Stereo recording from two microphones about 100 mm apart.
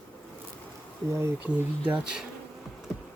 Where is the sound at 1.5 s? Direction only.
15° right (ahead or behind).